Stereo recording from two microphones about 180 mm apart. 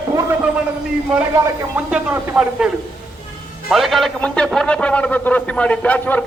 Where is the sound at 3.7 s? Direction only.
Centre (ahead or behind).